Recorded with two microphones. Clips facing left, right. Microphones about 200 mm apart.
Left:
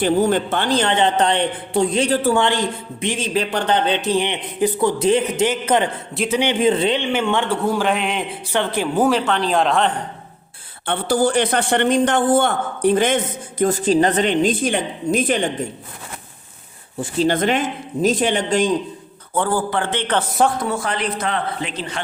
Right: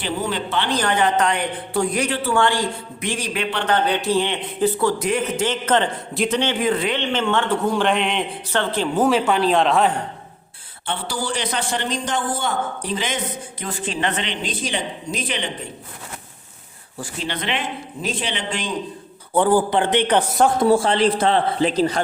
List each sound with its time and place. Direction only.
0.0 s a man's voice: 50° left (ahead or behind)
0.7 s a man's voice: 25° left (ahead or behind)
2.0 s a man's voice: 40° left (ahead or behind)
2.3 s a man's voice: 20° left (ahead or behind)
3.3 s a man's voice: 40° left (ahead or behind)
3.7 s a man's voice: 20° left (ahead or behind)
5.5 s a man's voice: 10° left (ahead or behind)
6.5 s a man's voice: 25° left (ahead or behind)
7.0 s a man's voice: 10° left (ahead or behind)
9.0 s a man's voice: 5° right (ahead or behind)
10.8 s a man's voice: 55° left (ahead or behind)
17.2 s a man's voice: 45° left (ahead or behind)
19.3 s a man's voice: 15° right (ahead or behind)
20.6 s a man's voice: 30° right (ahead or behind)